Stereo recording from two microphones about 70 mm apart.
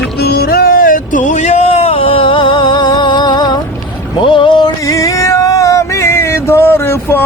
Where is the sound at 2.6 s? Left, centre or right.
Left.